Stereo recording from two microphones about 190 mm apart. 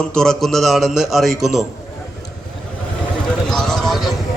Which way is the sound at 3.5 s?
Centre (ahead or behind).